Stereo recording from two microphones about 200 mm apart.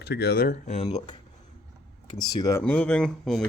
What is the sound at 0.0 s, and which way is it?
Speech, 55° left (ahead or behind).